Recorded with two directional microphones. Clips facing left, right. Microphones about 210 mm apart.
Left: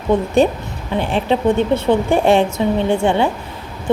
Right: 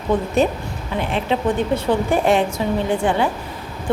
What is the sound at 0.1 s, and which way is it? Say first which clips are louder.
Speech: left 4 dB; 25° left (ahead or behind).